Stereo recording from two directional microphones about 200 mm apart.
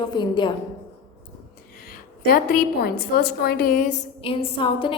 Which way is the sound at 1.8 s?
45° left (ahead or behind).